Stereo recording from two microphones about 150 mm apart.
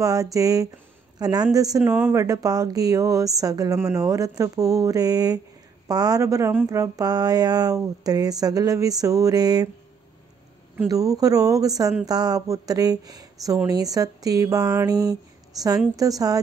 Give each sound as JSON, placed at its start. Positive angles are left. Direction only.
{"t": 0.0, "sound": "speech", "side_deg": -25}
{"t": 1.8, "sound": "speech", "side_deg": -10}
{"t": 2.2, "sound": "speech", "side_deg": -25}
{"t": 10.9, "sound": "speech", "side_deg": -25}